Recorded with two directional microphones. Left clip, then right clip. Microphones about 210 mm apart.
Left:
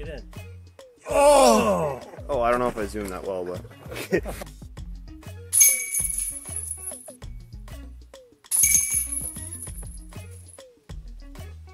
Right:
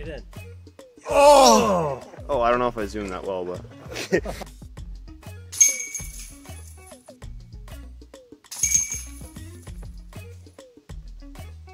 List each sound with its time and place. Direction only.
0.0 s music: centre (ahead or behind)
1.0 s groan: 20° right (ahead or behind)
1.5 s wail: 45° right (ahead or behind)
2.2 s speech: 15° right (ahead or behind)
3.9 s speech: 15° right (ahead or behind)
4.5 s music: centre (ahead or behind)